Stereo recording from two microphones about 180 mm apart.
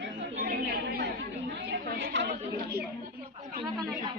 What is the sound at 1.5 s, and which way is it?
Chatter, 60° right (ahead or behind).